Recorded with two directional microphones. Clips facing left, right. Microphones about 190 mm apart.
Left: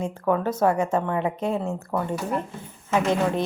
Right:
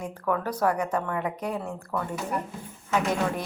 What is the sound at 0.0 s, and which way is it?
A woman's voice, 25° left (ahead or behind).